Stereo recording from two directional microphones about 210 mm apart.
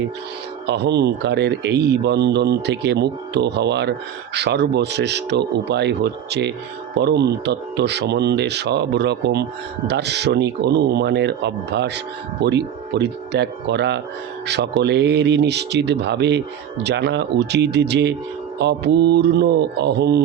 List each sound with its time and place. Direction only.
0.7 s speech: 55° right (ahead or behind)